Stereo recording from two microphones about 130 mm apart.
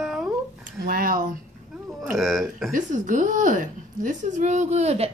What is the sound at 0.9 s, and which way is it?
Speech, 90° right.